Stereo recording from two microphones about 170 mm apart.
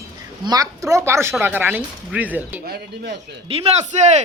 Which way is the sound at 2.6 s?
70° right (ahead or behind).